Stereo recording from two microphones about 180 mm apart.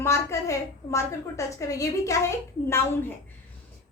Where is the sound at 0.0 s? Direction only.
15° left (ahead or behind).